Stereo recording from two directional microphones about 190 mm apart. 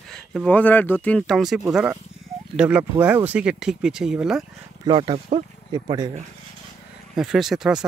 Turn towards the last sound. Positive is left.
turn(degrees=-5)  # may be behind; listen again after turning